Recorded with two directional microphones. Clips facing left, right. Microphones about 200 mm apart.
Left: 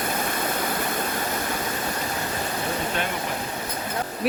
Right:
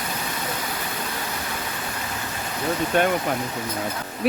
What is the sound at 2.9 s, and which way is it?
Speech, 50° right (ahead or behind).